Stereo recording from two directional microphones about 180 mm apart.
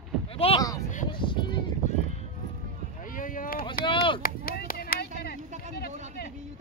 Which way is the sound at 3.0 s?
50° left (ahead or behind).